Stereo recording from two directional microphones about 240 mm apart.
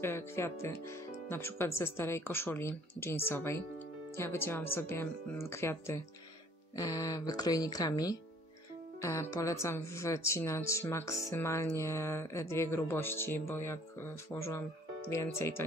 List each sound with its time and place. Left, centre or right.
0.0 s speech: centre